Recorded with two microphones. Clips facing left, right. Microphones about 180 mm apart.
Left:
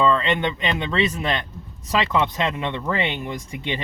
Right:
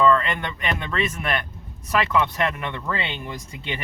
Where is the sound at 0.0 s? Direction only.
20° left (ahead or behind).